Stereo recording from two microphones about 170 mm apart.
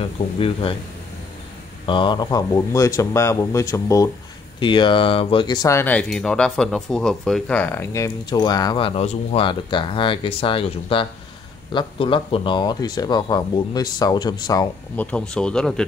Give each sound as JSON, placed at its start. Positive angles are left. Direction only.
{"t": 0.4, "sound": "speech", "side_deg": 35}
{"t": 1.9, "sound": "speech", "side_deg": 30}
{"t": 4.6, "sound": "speech", "side_deg": 30}
{"t": 15.0, "sound": "speech", "side_deg": 5}